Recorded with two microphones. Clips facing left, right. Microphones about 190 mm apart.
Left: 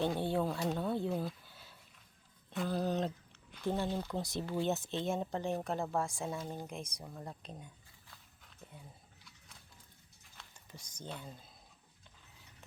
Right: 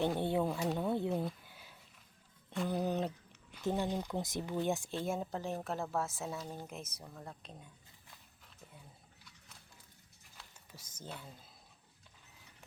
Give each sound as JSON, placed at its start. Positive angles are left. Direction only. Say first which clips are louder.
{"t": 0.2, "sound": "speech", "louder": "right 1 dB", "side_deg": -20}
{"t": 0.4, "sound": "speech", "louder": "right 1 dB", "side_deg": -5}
{"t": 7.0, "sound": "speech", "louder": "left 3 dB", "side_deg": 10}
{"t": 10.3, "sound": "a sound", "louder": "left 2 dB", "side_deg": -5}